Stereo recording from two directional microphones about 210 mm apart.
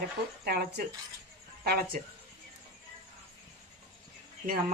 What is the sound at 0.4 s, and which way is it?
Speech, 50° right (ahead or behind).